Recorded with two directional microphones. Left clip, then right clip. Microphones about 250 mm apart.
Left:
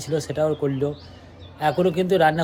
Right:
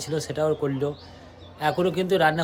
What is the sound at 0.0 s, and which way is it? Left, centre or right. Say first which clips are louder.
Speech: left 3 dB; centre.